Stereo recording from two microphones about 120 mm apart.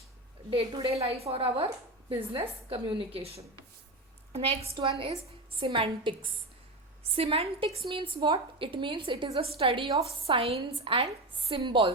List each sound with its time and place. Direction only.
0.5 s a woman's voice: 40° right (ahead or behind)
0.9 s a woman's voice: 55° right (ahead or behind)